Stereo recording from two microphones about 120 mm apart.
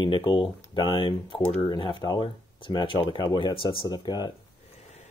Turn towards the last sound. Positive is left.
turn(degrees=35)  # may be behind; listen again after turning